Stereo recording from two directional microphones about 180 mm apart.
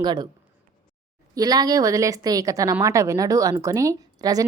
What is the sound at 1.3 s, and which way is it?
A woman's voice, 20° right (ahead or behind).